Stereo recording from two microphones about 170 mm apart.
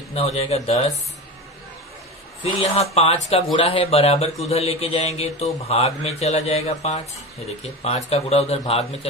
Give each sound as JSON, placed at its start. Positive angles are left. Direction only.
{"t": 0.1, "sound": "a man's voice", "side_deg": 35}
{"t": 2.7, "sound": "a man's voice", "side_deg": 35}